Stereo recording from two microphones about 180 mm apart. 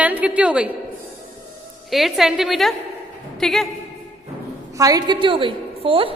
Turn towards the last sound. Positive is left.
turn(degrees=-30)  # may be behind; listen again after turning